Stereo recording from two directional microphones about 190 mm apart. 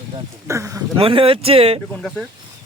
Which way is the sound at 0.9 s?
30° right (ahead or behind).